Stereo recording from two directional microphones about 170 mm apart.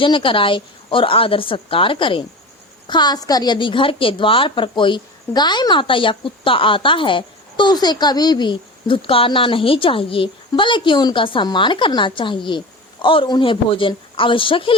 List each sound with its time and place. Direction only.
0.0 s a woman's voice: 30° left (ahead or behind)